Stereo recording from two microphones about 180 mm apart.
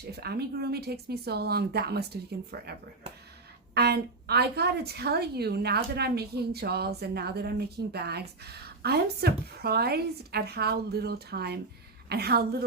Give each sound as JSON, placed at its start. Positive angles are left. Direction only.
{"t": 0.1, "sound": "a woman's voice", "side_deg": -65}
{"t": 3.8, "sound": "a woman's voice", "side_deg": -65}